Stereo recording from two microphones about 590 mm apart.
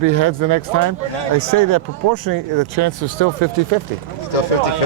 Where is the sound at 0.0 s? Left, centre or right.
Right.